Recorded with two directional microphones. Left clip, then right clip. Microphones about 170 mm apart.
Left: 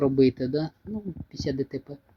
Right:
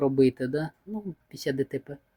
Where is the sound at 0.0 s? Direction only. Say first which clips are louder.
Left 1 dB; 10° right (ahead or behind).